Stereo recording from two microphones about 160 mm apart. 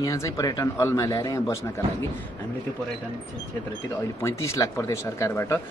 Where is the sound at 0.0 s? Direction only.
20° left (ahead or behind).